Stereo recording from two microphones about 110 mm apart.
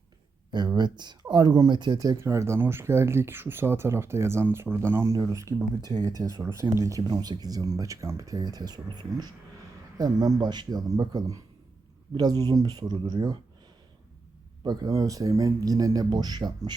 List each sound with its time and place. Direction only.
0.5 s speech: 40° right (ahead or behind)
14.6 s speech: 35° right (ahead or behind)